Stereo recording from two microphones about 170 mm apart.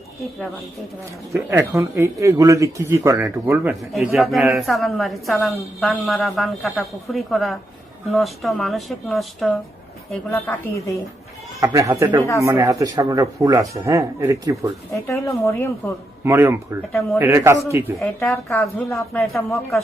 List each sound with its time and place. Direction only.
1.3 s speech: 15° right (ahead or behind)
3.7 s a woman's voice: centre (ahead or behind)
10.3 s a woman's voice: 15° left (ahead or behind)
11.6 s speech: 20° right (ahead or behind)
14.9 s a woman's voice: 15° left (ahead or behind)
16.2 s speech: 15° right (ahead or behind)
17.9 s a woman's voice: 5° left (ahead or behind)